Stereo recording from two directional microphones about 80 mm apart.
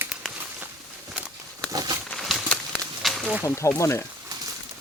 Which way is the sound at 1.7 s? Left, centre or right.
Right.